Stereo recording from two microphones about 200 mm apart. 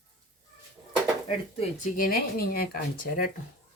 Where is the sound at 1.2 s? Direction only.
40° left (ahead or behind).